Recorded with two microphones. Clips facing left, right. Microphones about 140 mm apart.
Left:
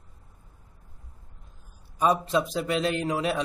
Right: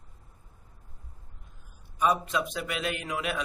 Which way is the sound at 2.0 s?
30° left (ahead or behind).